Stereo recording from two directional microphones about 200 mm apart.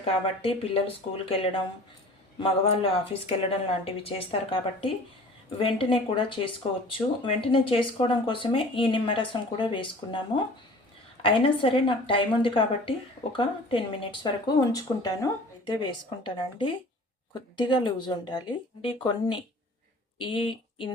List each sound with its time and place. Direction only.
0.4 s speech: 30° left (ahead or behind)